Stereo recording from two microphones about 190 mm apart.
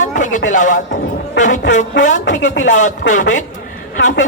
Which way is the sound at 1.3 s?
40° left (ahead or behind).